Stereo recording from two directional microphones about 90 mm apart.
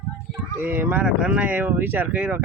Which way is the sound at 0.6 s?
20° right (ahead or behind).